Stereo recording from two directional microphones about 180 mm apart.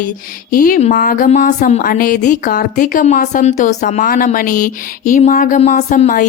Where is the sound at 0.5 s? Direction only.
50° left (ahead or behind).